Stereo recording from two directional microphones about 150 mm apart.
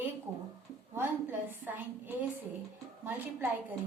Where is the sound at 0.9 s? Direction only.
15° right (ahead or behind).